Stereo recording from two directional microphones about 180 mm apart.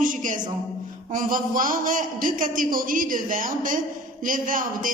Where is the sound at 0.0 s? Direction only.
45° right (ahead or behind).